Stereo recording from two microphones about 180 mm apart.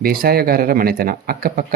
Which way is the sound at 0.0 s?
55° right (ahead or behind).